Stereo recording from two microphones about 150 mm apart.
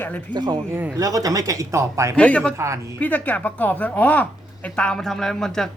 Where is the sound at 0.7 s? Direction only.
15° right (ahead or behind).